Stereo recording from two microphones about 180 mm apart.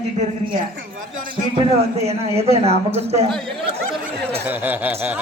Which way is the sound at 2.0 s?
35° right (ahead or behind).